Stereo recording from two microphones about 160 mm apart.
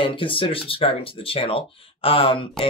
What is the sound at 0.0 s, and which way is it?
Speech, 35° left (ahead or behind).